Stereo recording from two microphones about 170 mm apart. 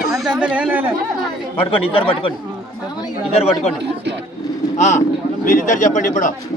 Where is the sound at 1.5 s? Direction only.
30° left (ahead or behind).